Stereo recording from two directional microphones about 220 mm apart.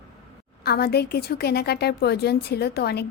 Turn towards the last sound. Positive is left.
turn(degrees=45)  # may be behind; listen again after turning